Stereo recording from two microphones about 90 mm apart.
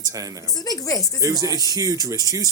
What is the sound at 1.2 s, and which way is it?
Speech, 40° right (ahead or behind).